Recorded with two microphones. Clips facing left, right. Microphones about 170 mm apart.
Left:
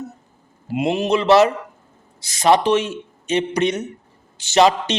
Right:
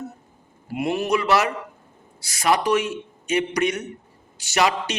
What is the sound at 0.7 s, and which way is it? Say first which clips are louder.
Speech: left 4 dB; 20° left (ahead or behind).